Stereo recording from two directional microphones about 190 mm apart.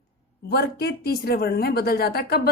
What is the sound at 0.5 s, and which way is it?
A woman's voice, 55° left (ahead or behind).